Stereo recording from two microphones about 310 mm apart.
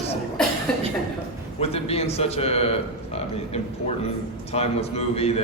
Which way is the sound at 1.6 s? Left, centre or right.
Centre.